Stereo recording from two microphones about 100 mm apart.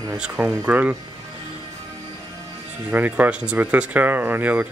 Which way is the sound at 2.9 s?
15° right (ahead or behind).